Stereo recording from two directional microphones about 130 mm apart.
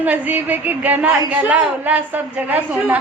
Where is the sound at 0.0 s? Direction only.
15° right (ahead or behind).